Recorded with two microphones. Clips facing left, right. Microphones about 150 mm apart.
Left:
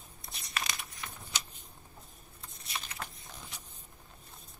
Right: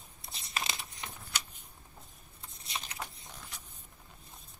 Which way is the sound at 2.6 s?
20° right (ahead or behind).